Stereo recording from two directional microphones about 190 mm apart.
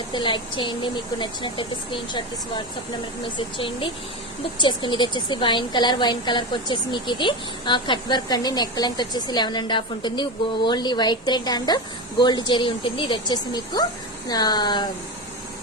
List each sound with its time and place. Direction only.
0.1 s a woman's voice: 25° left (ahead or behind)
3.3 s a woman's voice: 25° left (ahead or behind)